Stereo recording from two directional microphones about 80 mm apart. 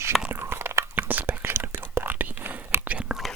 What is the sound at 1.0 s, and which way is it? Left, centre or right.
Whispering, right.